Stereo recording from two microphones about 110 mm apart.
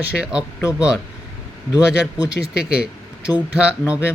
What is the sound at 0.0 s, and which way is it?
Speech, 10° right (ahead or behind).